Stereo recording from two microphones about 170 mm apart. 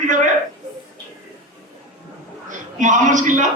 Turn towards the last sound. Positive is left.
turn(degrees=-45)  # may be behind; listen again after turning